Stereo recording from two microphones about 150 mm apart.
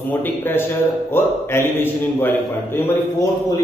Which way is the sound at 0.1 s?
15° left (ahead or behind).